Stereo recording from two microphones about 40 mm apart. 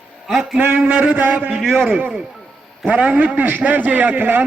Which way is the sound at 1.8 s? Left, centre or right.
Right.